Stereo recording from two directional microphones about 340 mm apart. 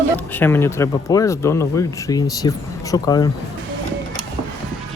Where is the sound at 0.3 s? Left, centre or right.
Centre.